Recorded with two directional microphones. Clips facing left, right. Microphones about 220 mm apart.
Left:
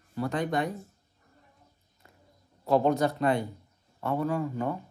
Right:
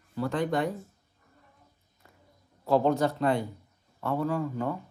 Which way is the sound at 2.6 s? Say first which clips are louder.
Even; 15° left (ahead or behind).